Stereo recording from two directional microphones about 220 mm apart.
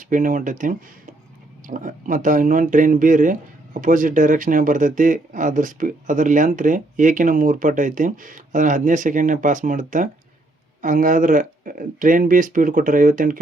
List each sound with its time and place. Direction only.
0.0 s speech: 35° right (ahead or behind)